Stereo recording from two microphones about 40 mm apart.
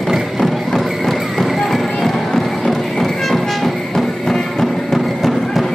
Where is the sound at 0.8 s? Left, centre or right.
Centre.